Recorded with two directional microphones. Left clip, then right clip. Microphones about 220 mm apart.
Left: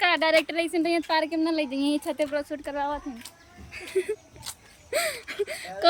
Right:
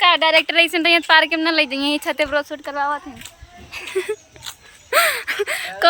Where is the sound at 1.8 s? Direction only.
30° right (ahead or behind).